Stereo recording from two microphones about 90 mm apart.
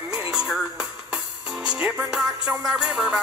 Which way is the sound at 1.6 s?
10° right (ahead or behind).